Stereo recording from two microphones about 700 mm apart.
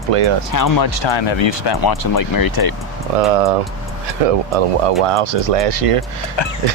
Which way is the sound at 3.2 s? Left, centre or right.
Right.